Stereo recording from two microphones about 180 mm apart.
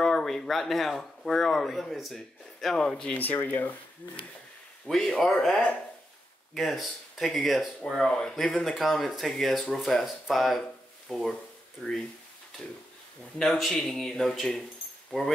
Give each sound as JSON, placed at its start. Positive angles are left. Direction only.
{"t": 0.0, "sound": "speech", "side_deg": 0}
{"t": 4.8, "sound": "speech", "side_deg": 0}
{"t": 13.4, "sound": "speech", "side_deg": 0}